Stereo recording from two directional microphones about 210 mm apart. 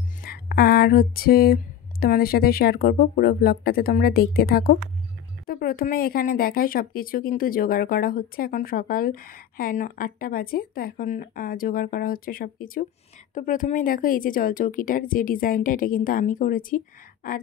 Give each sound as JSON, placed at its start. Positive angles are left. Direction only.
{"t": 0.2, "sound": "speech", "side_deg": 45}